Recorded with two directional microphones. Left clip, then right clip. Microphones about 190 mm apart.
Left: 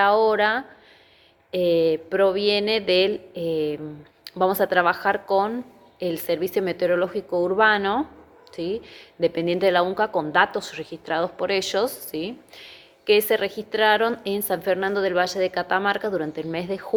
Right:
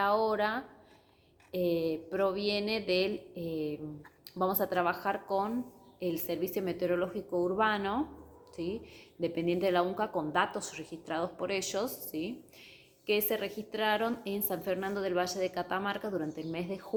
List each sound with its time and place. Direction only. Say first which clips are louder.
0.0 s a woman's voice: left 11 dB; 20° left (ahead or behind)